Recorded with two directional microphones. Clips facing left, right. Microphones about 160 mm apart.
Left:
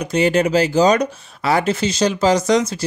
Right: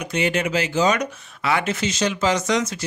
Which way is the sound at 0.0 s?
35° left (ahead or behind).